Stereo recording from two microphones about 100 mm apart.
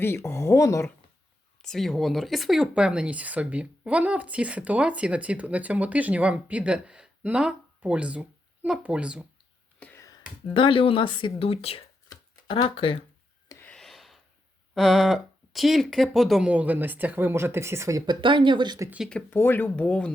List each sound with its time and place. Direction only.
0.0 s speech: 25° left (ahead or behind)
1.6 s speech: centre (ahead or behind)
9.8 s a sound: 10° left (ahead or behind)
10.5 s speech: 60° left (ahead or behind); by 11.8 s 80° left
12.6 s speech: 60° left (ahead or behind)
13.7 s a sound: 5° left (ahead or behind)
14.8 s speech: centre (ahead or behind)
16.5 s speech: 15° right (ahead or behind)
18.0 s speech: 50° right (ahead or behind)
19.3 s speech: 20° left (ahead or behind)